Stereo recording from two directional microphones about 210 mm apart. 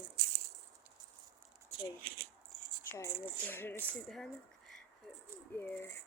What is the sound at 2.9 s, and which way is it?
Speech, 10° left (ahead or behind).